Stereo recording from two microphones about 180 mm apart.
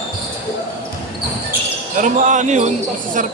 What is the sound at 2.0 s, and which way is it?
Speech, 45° right (ahead or behind).